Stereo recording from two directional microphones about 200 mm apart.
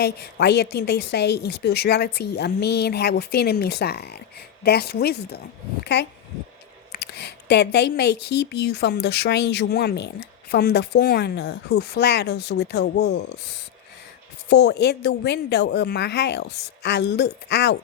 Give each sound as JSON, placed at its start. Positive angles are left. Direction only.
{"t": 0.0, "sound": "a woman's voice", "side_deg": 55}
{"t": 14.5, "sound": "a woman's voice", "side_deg": 55}